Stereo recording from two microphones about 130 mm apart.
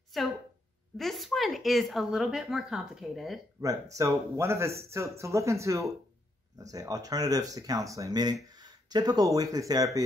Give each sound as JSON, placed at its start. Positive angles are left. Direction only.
{"t": 0.1, "sound": "a sound", "side_deg": 0}
{"t": 0.9, "sound": "speech", "side_deg": 0}
{"t": 3.6, "sound": "speech", "side_deg": -25}